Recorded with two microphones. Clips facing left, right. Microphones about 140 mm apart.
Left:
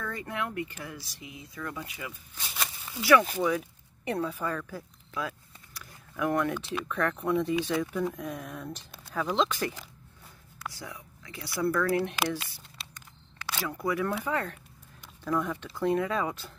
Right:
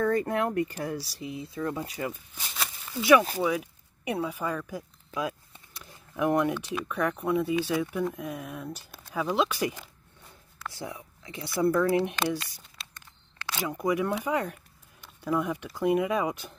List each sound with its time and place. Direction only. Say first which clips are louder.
0.0 s speech: right 9 dB; 45° right (ahead or behind)
2.4 s speech: even; centre (ahead or behind)
3.0 s speech: right 2 dB; 20° right (ahead or behind)
10.7 s speech: right 5 dB; 25° right (ahead or behind)
12.8 s a sound: even; centre (ahead or behind)
13.6 s speech: right 3 dB; 20° right (ahead or behind)